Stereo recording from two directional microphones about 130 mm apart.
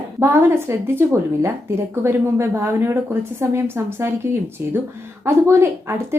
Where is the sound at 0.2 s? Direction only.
20° right (ahead or behind).